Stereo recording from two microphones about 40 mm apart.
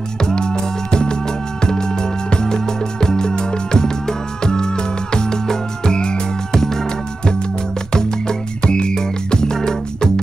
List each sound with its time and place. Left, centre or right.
0.2 s music: centre
6.6 s music: centre
7.9 s music: centre